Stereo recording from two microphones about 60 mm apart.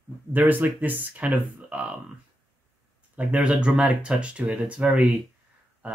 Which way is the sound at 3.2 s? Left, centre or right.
Right.